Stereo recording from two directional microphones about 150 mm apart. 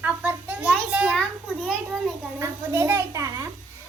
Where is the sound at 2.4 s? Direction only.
15° right (ahead or behind).